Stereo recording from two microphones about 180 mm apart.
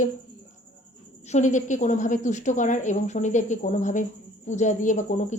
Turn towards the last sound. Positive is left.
turn(degrees=45)  # may be behind; listen again after turning